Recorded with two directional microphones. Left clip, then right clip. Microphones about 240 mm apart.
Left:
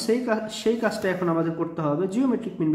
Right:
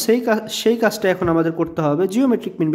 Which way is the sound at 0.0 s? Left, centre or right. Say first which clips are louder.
Right 6 dB; right.